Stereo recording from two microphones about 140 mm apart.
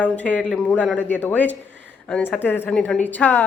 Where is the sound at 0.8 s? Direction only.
10° right (ahead or behind).